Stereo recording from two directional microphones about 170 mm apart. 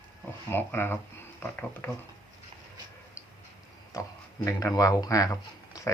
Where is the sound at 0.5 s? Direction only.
15° left (ahead or behind).